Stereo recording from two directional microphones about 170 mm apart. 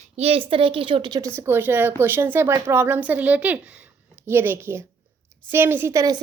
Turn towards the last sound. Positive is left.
turn(degrees=-20)  # may be behind; listen again after turning